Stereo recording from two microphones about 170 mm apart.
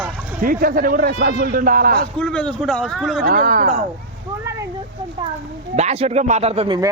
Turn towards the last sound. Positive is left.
turn(degrees=-25)  # may be behind; listen again after turning